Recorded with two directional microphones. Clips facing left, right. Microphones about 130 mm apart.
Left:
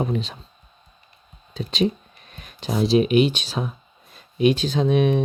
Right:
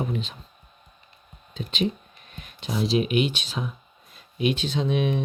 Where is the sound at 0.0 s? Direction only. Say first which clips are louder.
Left 4 dB; 35° left (ahead or behind).